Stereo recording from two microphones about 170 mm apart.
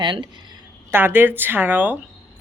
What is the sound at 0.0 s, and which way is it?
Speech, 25° right (ahead or behind).